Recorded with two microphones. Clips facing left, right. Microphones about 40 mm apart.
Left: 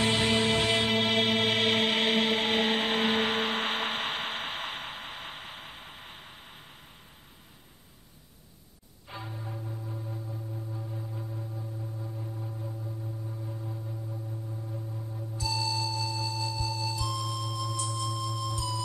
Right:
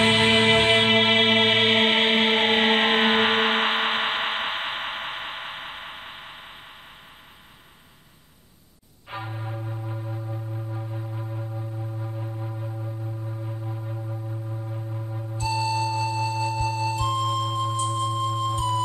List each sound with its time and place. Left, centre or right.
0.0 s music: right
9.1 s music: right